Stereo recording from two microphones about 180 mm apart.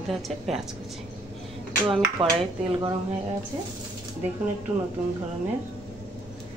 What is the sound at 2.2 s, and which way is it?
Speech, 30° right (ahead or behind).